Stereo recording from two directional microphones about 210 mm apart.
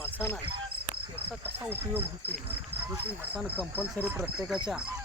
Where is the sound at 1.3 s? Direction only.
10° right (ahead or behind).